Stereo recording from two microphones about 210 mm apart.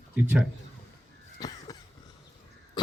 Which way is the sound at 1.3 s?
20° left (ahead or behind).